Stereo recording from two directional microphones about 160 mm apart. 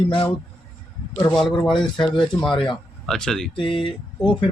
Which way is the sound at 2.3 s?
15° left (ahead or behind).